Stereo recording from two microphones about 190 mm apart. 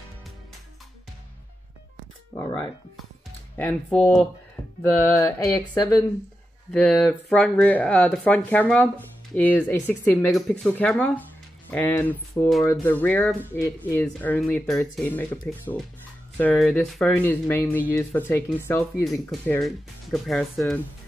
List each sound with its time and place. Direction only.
2.3 s speech: 15° left (ahead or behind)
6.7 s speech: 5° left (ahead or behind)
16.3 s speech: 5° left (ahead or behind)
19.0 s speech: centre (ahead or behind)